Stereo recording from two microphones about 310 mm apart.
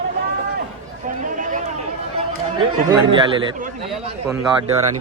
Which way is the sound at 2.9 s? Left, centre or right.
Centre.